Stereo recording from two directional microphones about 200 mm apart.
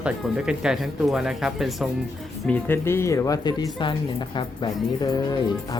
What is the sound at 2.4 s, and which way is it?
Speech, 10° left (ahead or behind).